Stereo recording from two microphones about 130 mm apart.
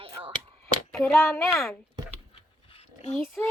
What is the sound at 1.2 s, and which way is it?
Speech, 20° left (ahead or behind).